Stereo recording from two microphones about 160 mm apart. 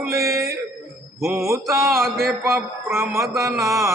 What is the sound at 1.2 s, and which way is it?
Mantra, 20° right (ahead or behind).